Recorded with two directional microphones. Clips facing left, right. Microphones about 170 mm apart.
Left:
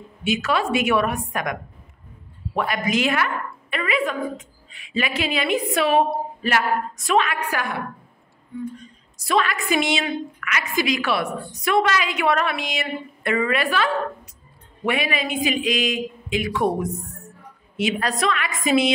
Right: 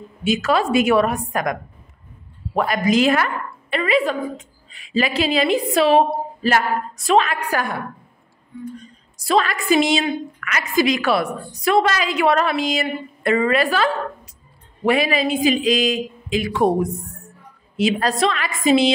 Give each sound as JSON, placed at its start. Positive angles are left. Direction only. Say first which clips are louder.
{"t": 0.2, "sound": "a woman's voice", "louder": "right 4 dB", "side_deg": -40}
{"t": 9.2, "sound": "a woman's voice", "louder": "right 3 dB", "side_deg": -35}